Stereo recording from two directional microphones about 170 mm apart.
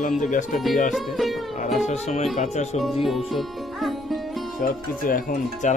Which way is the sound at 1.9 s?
40° left (ahead or behind).